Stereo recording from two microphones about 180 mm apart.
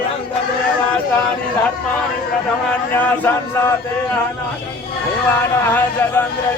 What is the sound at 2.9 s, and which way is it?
Speech, 15° left (ahead or behind).